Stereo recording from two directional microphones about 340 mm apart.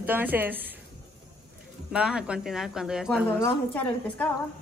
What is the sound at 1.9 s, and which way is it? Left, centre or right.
Speech, centre.